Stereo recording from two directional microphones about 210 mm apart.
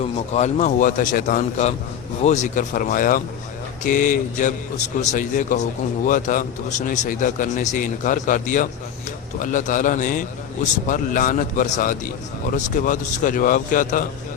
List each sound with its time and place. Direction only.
0.0 s a man's voice: 30° left (ahead or behind)